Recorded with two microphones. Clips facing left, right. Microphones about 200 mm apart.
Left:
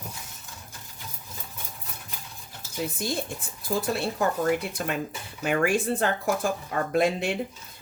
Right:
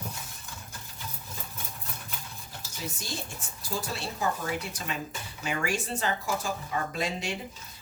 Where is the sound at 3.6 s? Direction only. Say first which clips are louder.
Left 8 dB; 55° left (ahead or behind).